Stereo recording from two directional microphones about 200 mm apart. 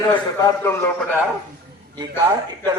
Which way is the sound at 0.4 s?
10° left (ahead or behind).